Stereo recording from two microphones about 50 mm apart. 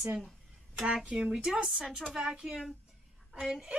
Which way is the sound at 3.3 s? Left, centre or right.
Centre.